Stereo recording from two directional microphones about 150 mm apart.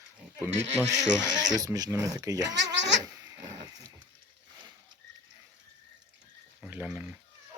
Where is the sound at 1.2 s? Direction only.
25° right (ahead or behind).